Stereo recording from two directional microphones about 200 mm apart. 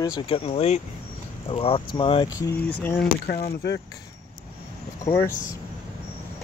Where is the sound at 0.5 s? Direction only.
30° left (ahead or behind).